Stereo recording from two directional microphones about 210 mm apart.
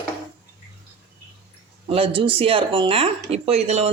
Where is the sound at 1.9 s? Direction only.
25° right (ahead or behind).